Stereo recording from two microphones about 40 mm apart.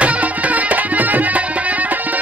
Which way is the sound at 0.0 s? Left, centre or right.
Right.